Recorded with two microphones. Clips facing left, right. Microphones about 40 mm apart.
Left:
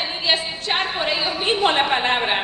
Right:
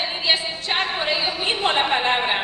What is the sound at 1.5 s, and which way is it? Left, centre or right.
Speech, left.